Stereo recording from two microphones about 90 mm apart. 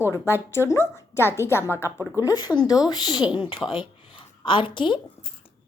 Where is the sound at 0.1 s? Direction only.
30° left (ahead or behind).